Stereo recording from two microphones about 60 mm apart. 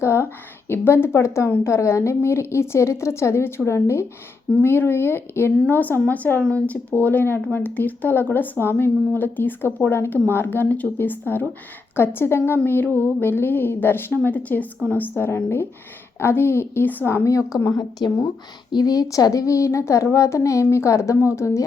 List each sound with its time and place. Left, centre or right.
0.0 s a woman's voice: left
1.2 s a woman's voice: left
5.5 s speech: left
14.2 s a woman's voice: left
17.2 s a woman's voice: left
18.9 s a woman's voice: left